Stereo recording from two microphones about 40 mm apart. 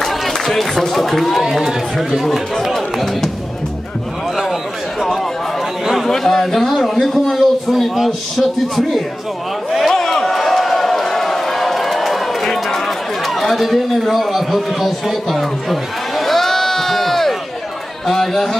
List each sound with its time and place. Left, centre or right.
0.0 s speech: centre
1.4 s speech: centre
2.7 s a man's voice: centre
6.0 s a man's voice: centre
9.7 s a sound: centre
13.4 s a man's voice: centre